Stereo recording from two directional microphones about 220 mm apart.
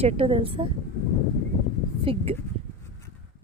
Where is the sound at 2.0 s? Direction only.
25° right (ahead or behind).